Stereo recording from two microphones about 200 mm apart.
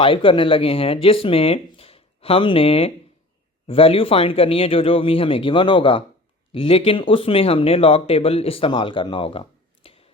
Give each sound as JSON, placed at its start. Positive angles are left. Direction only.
{"t": 0.0, "sound": "speech", "side_deg": 25}